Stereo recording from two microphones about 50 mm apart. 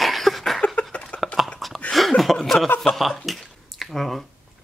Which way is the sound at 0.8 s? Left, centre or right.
Left.